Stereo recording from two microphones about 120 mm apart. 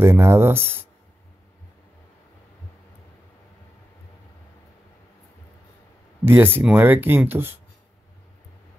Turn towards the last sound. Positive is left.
turn(degrees=-20)  # may be behind; listen again after turning